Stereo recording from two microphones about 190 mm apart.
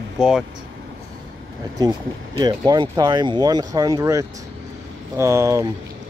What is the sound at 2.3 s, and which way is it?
Speech, 20° right (ahead or behind).